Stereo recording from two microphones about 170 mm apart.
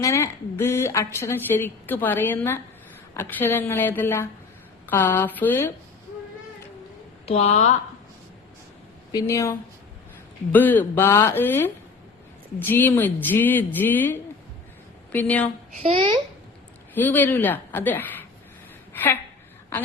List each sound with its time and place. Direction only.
0.0 s a woman's voice: 15° left (ahead or behind)
7.3 s speech: 40° left (ahead or behind)
9.1 s a woman's voice: 15° left (ahead or behind)
15.8 s a child's voice: 30° right (ahead or behind)
16.9 s a woman's voice: 10° left (ahead or behind)